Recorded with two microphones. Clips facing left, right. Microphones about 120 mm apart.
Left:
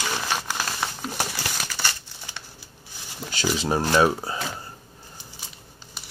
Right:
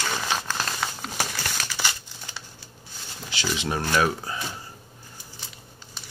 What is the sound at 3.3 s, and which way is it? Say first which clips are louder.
Speech: left 4 dB; 40° left (ahead or behind).